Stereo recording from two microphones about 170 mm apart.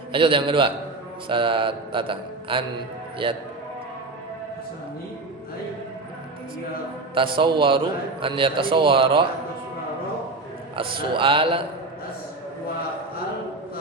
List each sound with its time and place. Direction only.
0.1 s a man's voice: 30° right (ahead or behind)
1.3 s mantra: 30° right (ahead or behind)
7.1 s a man's voice: 30° right (ahead or behind)
8.2 s mantra: 30° right (ahead or behind)
10.8 s mantra: 30° right (ahead or behind)